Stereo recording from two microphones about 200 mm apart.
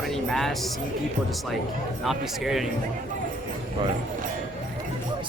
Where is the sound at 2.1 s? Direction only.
Centre (ahead or behind).